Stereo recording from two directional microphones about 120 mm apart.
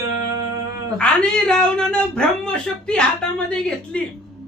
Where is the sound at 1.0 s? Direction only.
10° left (ahead or behind).